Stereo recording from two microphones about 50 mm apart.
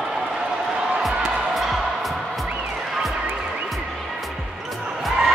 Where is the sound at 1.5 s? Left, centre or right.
Centre.